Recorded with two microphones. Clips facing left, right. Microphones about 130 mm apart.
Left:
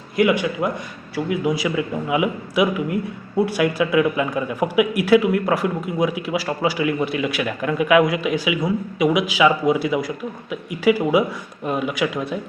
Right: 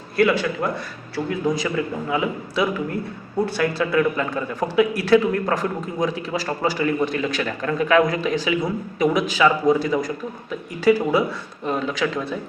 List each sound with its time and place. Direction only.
0.2 s speech: 15° left (ahead or behind)